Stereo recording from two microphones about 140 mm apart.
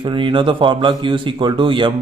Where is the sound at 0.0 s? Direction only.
35° right (ahead or behind).